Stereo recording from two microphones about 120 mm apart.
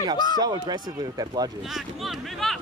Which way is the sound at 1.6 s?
Centre (ahead or behind).